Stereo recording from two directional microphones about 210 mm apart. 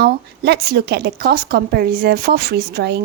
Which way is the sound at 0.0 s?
50° right (ahead or behind).